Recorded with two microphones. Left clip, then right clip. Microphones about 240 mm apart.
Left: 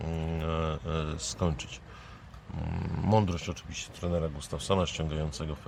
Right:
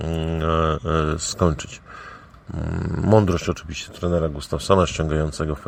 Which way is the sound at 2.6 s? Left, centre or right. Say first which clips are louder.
Right 10 dB; centre.